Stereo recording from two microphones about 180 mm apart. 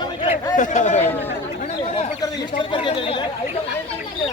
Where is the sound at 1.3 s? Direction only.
35° left (ahead or behind).